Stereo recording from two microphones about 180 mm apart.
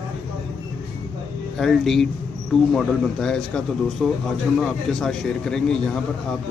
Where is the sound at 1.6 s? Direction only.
Centre (ahead or behind).